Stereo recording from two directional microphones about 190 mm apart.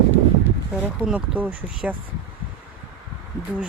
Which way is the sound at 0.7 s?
5° right (ahead or behind).